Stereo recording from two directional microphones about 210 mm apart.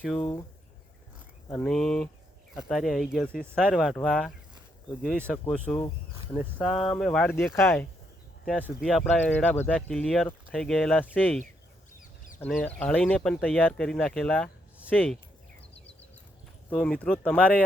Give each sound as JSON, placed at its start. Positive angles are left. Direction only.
{"t": 0.2, "sound": "speech", "side_deg": 20}
{"t": 1.5, "sound": "speech", "side_deg": 5}
{"t": 5.5, "sound": "speech", "side_deg": 5}
{"t": 8.8, "sound": "speech", "side_deg": 0}
{"t": 16.6, "sound": "speech", "side_deg": 5}